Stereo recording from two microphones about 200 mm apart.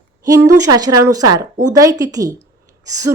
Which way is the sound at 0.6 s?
20° right (ahead or behind).